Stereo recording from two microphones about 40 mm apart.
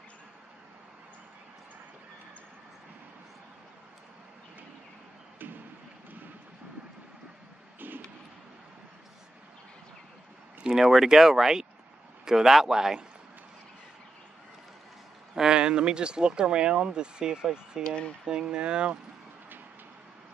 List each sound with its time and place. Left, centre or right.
7.8 s a sound: right
10.6 s speech: centre
15.3 s speech: centre
17.8 s speech: left
18.2 s speech: right